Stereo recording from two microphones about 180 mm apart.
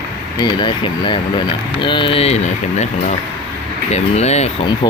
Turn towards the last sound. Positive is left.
turn(degrees=40)  # may be behind; listen again after turning